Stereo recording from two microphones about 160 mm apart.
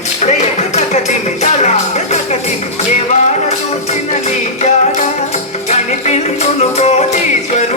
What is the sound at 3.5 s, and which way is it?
Music, 45° left (ahead or behind).